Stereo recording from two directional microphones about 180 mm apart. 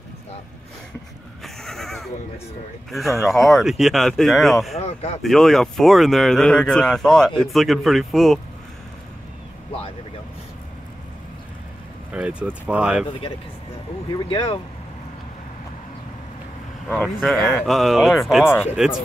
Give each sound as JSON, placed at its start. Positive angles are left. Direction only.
{"t": 1.4, "sound": "a sound", "side_deg": 0}
{"t": 2.9, "sound": "speech", "side_deg": 0}
{"t": 4.7, "sound": "speech", "side_deg": 35}
{"t": 5.2, "sound": "speech", "side_deg": 0}
{"t": 12.1, "sound": "speech", "side_deg": -5}
{"t": 14.1, "sound": "speech", "side_deg": 25}
{"t": 16.9, "sound": "speech", "side_deg": 0}
{"t": 18.4, "sound": "speech", "side_deg": 10}